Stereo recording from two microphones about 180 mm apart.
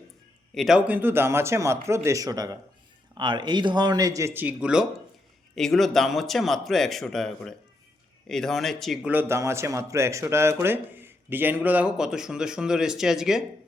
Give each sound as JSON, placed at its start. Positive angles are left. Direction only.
{"t": 0.5, "sound": "a man's voice", "side_deg": 0}
{"t": 9.1, "sound": "a man's voice", "side_deg": -15}